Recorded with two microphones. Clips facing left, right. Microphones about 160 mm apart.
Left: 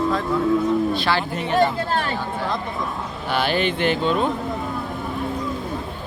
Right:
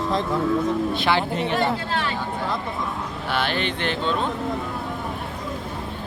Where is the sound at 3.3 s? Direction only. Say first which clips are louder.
Left 4 dB; centre (ahead or behind).